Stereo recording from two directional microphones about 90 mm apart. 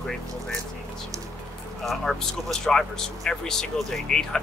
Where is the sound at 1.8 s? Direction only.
5° left (ahead or behind).